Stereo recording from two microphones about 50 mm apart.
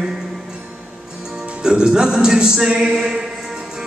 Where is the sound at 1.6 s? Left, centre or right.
Centre.